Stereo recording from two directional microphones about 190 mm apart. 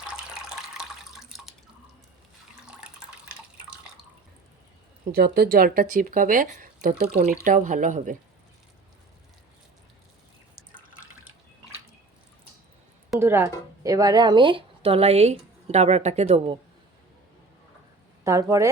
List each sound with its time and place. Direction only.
0.1 s water: 5° right (ahead or behind)
2.6 s water: 5° right (ahead or behind)
5.1 s speech: 55° right (ahead or behind)
13.1 s speech: 10° right (ahead or behind); by 16.6 s 35° right (ahead or behind)
18.2 s speech: 15° right (ahead or behind)